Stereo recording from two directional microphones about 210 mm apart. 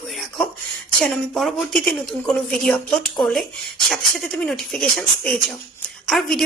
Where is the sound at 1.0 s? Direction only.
5° left (ahead or behind).